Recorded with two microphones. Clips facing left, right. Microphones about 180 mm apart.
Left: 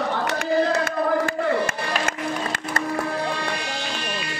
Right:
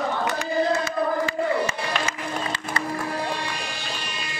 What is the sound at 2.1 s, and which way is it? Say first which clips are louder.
Music: left 3 dB; 50° left (ahead or behind).